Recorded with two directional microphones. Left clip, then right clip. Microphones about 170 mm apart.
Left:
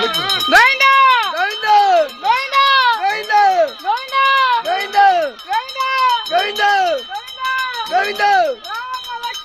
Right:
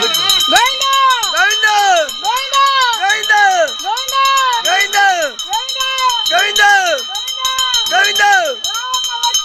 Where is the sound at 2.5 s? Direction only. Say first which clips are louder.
Right 1 dB; 40° right (ahead or behind).